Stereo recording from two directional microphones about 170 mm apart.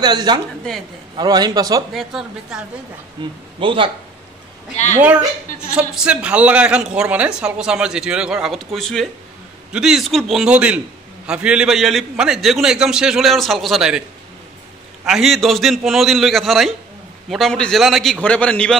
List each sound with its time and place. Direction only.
0.0 s a man's voice: 25° right (ahead or behind)
2.0 s a woman's voice: centre (ahead or behind)
3.2 s a man's voice: 25° right (ahead or behind)
4.9 s a woman's voice: 10° right (ahead or behind)
15.0 s a woman's voice: centre (ahead or behind)